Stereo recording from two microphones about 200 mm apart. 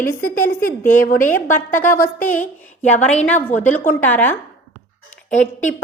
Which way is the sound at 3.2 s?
10° left (ahead or behind).